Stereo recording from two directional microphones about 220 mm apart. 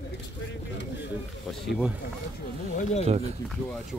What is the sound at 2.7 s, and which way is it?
Speech, 30° left (ahead or behind).